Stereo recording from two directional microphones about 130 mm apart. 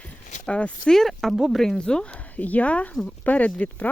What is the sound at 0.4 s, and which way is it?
Speech, 10° left (ahead or behind).